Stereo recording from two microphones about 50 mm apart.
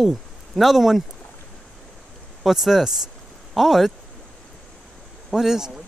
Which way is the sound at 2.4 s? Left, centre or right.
Centre.